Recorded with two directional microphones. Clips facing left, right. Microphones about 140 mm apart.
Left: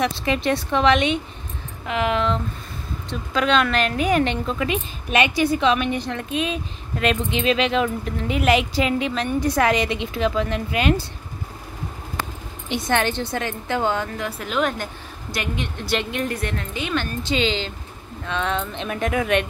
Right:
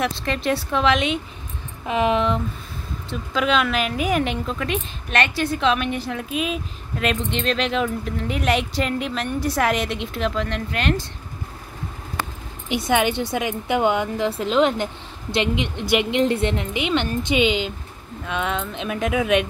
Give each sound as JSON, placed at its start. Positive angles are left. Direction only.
{"t": 0.0, "sound": "a woman's voice", "side_deg": 5}
{"t": 1.9, "sound": "a woman's voice", "side_deg": -20}
{"t": 3.1, "sound": "a woman's voice", "side_deg": -5}
{"t": 12.6, "sound": "a woman's voice", "side_deg": -5}